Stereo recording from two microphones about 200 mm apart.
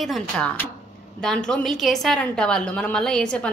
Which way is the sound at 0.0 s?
5° left (ahead or behind).